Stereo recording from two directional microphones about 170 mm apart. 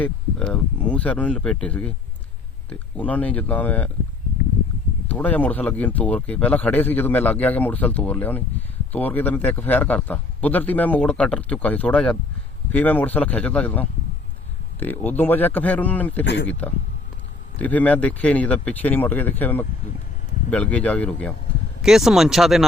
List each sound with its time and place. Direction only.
0.0 s speech: 5° left (ahead or behind)
5.0 s speech: 10° left (ahead or behind)
16.2 s speech: 90° left
16.5 s speech: 10° left (ahead or behind)